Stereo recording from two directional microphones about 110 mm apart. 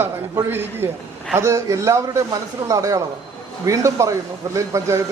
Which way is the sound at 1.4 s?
25° right (ahead or behind).